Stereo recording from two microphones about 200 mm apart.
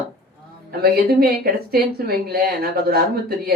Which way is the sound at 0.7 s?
50° right (ahead or behind).